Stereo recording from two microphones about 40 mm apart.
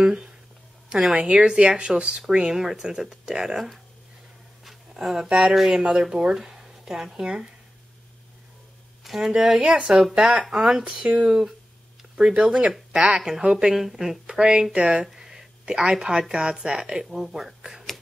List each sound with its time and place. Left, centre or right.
0.8 s speech: centre
1.1 s speech: right
4.9 s speech: centre
5.9 s speech: centre
9.0 s speech: centre
9.8 s speech: right
10.5 s speech: centre
10.8 s speech: right
12.7 s speech: centre
14.4 s speech: right
15.0 s a sound: centre
15.6 s speech: centre